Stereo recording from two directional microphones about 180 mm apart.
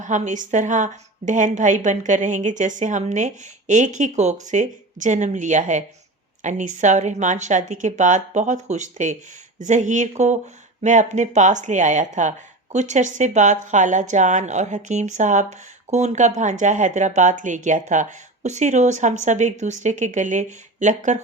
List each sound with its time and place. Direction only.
0.0 s a woman's voice: 45° right (ahead or behind)